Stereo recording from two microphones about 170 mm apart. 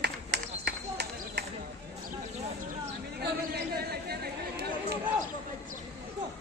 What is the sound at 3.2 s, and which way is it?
Chatter, 70° right (ahead or behind).